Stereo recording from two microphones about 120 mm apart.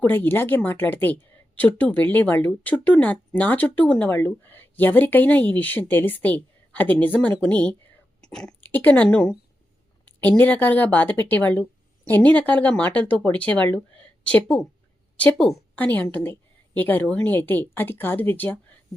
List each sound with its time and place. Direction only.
0.0 s a woman's voice: 15° left (ahead or behind)